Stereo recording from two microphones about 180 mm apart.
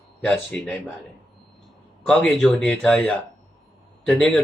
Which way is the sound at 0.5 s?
Centre (ahead or behind).